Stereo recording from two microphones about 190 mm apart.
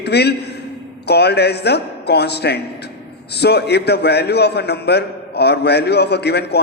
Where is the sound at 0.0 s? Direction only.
60° left (ahead or behind).